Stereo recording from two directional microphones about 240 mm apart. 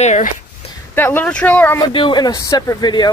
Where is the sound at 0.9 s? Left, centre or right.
Centre.